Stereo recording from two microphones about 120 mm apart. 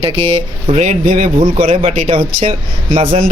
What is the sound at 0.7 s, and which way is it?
Speech, 80° right.